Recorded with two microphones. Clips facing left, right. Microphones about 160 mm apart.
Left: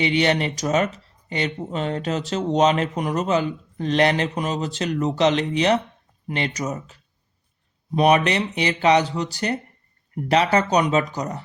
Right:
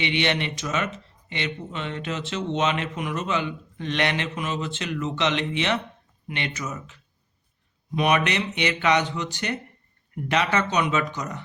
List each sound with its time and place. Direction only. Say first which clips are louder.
0.0 s speech: left 5 dB; 40° left (ahead or behind)